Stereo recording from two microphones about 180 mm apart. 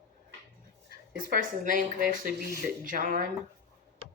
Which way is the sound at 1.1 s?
50° right (ahead or behind).